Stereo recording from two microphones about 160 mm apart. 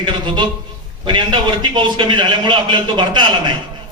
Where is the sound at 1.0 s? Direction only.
30° right (ahead or behind).